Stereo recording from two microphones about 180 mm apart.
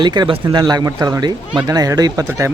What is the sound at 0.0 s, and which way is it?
Speech, 25° right (ahead or behind).